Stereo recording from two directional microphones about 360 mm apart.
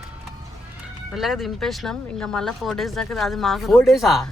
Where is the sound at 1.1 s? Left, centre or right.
Centre.